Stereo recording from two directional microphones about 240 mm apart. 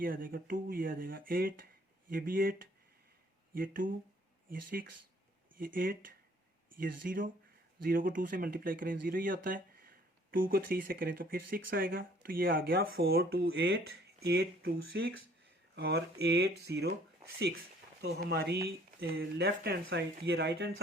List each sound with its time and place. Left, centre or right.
0.0 s speech: right
18.0 s speech: right